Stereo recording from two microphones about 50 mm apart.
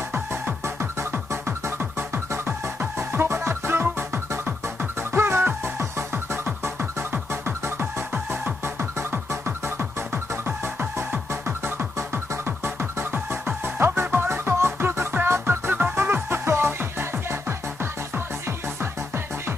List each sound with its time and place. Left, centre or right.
0.1 s music: right
5.8 s music: right
6.8 s music: right